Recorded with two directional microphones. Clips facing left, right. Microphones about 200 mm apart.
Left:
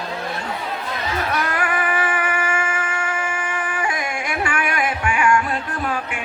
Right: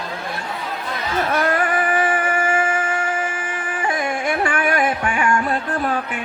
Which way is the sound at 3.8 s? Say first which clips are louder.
Right 7 dB; 35° right (ahead or behind).